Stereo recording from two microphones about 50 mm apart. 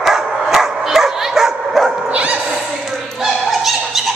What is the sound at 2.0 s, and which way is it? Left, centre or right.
Bow-wow, right.